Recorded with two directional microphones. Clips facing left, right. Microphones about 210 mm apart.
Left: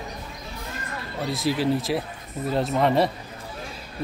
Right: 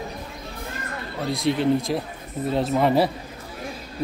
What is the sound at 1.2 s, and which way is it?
Speech, centre (ahead or behind).